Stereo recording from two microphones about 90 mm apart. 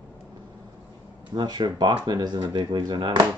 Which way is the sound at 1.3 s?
50° right (ahead or behind).